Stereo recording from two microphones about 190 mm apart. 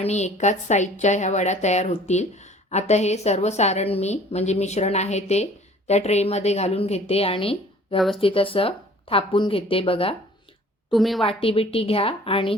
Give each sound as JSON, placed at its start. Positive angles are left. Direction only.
{"t": 0.0, "sound": "a woman's voice", "side_deg": 35}
{"t": 7.9, "sound": "speech", "side_deg": 0}
{"t": 8.2, "sound": "speech", "side_deg": 30}
{"t": 10.9, "sound": "speech", "side_deg": 0}
{"t": 11.2, "sound": "speech", "side_deg": 30}